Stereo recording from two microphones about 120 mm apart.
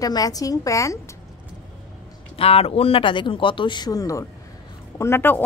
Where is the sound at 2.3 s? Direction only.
55° left (ahead or behind); by 5.4 s 20° left (ahead or behind).